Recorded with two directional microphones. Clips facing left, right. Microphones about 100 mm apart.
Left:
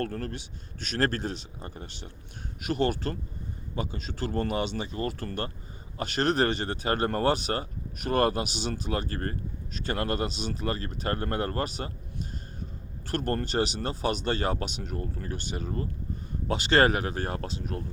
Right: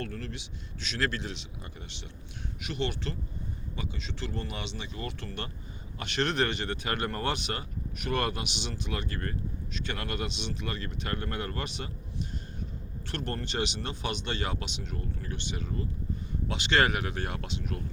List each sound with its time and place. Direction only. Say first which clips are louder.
0.0 s speech: left 5 dB; 45° left (ahead or behind)
13.1 s speech: left 6 dB; 45° left (ahead or behind)